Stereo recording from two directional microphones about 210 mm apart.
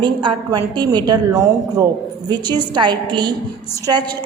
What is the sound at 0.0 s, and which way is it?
A woman's voice, 20° right (ahead or behind).